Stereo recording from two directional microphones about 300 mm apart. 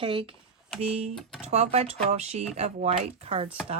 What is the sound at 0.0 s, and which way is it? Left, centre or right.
Speech, centre.